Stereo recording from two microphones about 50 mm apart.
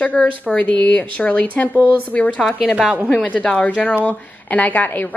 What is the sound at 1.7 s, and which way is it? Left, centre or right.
Speech, right.